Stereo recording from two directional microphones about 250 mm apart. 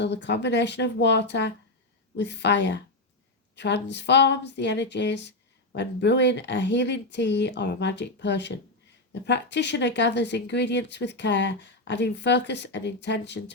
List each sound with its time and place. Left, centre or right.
0.0 s speech: left